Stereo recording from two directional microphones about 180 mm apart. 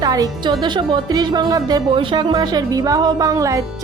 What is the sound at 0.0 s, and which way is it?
A woman's voice, 20° right (ahead or behind).